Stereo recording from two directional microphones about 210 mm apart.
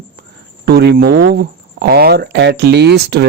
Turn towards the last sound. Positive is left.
turn(degrees=-50)  # may be behind; listen again after turning